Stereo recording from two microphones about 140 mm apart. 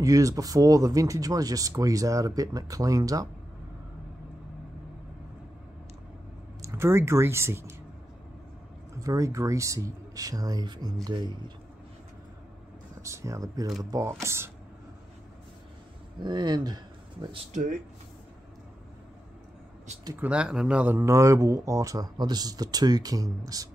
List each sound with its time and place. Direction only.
0.0 s speech: 25° right (ahead or behind)
6.6 s speech: 20° right (ahead or behind)
8.9 s speech: 25° right (ahead or behind)
13.0 s speech: 20° right (ahead or behind)
16.2 s speech: 30° right (ahead or behind)
17.5 s speech: 70° right (ahead or behind)
20.2 s speech: 10° right (ahead or behind); by 23.7 s 25° right (ahead or behind)